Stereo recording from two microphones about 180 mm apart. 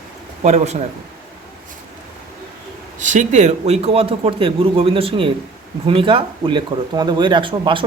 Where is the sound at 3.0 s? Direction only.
45° right (ahead or behind).